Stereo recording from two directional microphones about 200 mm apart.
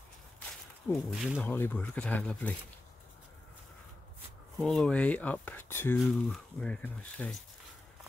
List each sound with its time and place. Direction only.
1.1 s speech: centre (ahead or behind)
1.4 s speech: 10° left (ahead or behind)
4.6 s speech: centre (ahead or behind)
5.9 s speech: centre (ahead or behind)